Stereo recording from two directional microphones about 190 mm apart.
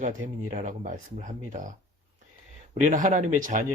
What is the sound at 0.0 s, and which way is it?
Speech, 45° right (ahead or behind).